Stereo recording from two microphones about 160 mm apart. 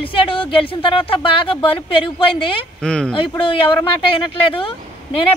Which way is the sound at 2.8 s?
5° left (ahead or behind).